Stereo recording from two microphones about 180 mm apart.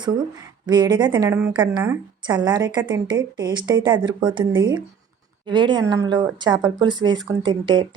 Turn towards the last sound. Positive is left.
turn(degrees=-25)  # may be behind; listen again after turning